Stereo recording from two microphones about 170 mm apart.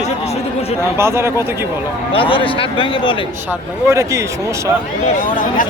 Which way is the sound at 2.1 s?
30° left (ahead or behind).